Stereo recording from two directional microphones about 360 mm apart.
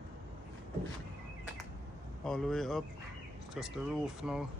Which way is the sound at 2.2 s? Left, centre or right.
Centre.